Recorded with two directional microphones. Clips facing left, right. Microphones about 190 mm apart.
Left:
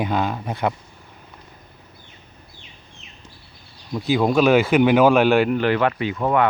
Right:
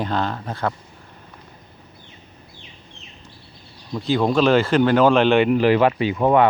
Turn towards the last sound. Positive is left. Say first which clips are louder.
# right 3 dB
turn(degrees=-25)  # may be behind; listen again after turning